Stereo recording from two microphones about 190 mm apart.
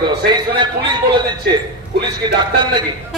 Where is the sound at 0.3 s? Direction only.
25° right (ahead or behind).